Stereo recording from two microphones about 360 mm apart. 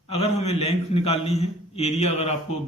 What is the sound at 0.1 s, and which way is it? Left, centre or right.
A man's voice, centre.